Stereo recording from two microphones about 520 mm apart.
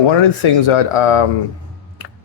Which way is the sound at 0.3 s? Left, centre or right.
Left.